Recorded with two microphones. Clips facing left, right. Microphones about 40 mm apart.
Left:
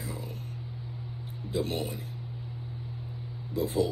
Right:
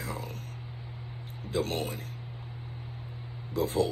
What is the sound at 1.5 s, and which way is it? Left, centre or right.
Speech, right.